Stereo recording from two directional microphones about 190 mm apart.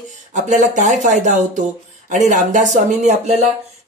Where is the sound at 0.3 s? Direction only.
40° right (ahead or behind).